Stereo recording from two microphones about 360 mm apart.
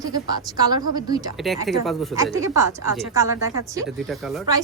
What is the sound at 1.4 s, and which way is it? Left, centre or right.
Speech, centre.